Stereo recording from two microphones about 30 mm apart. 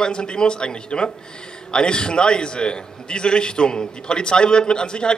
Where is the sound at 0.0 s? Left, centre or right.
Left.